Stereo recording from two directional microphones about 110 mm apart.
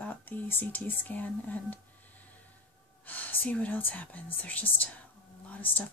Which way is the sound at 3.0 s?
15° left (ahead or behind).